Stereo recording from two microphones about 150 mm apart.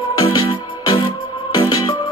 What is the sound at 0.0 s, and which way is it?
Music, 35° left (ahead or behind).